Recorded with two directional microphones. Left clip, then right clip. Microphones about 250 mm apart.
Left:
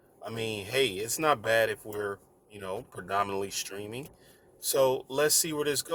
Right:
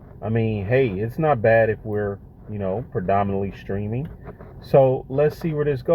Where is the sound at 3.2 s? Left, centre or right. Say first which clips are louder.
Right 6 dB; left.